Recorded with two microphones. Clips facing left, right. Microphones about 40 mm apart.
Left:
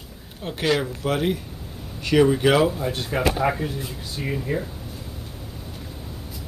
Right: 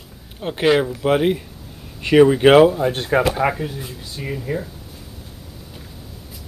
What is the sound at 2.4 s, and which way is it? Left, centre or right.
Speech, right.